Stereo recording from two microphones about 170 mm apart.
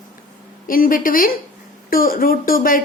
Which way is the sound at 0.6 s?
55° left (ahead or behind).